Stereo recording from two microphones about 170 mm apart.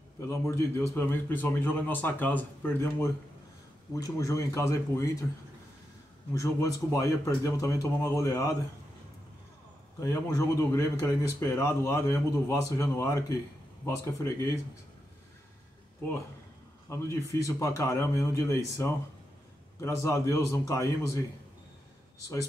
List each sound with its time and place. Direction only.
0.3 s speech: 15° left (ahead or behind)
6.3 s speech: 20° left (ahead or behind)
9.9 s speech: 15° left (ahead or behind)
16.9 s speech: 15° left (ahead or behind)